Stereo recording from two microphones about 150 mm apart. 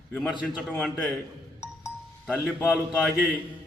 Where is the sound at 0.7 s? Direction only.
5° left (ahead or behind).